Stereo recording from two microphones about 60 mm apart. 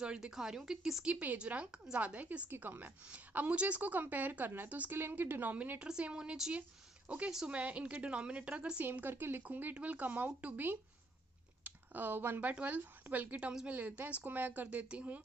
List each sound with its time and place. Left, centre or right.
0.0 s speech: centre
1.0 s a woman's voice: right
4.9 s a woman's voice: right
5.9 s speech: centre
7.5 s a woman's voice: right
8.8 s a woman's voice: right